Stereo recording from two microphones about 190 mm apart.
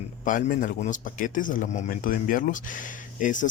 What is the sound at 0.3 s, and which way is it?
A man's voice, 45° left (ahead or behind).